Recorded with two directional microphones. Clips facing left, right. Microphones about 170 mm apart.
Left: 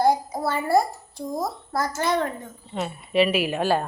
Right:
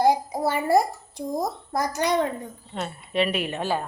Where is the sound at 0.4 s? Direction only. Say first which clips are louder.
Right 1 dB; 20° right (ahead or behind).